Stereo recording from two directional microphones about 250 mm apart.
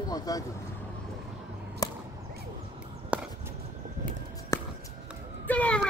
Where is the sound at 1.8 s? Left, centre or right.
Centre.